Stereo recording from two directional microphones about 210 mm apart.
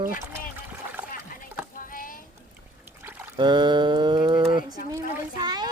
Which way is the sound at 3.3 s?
20° right (ahead or behind).